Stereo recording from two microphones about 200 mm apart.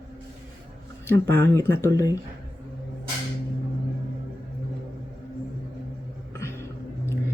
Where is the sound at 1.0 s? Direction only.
10° left (ahead or behind).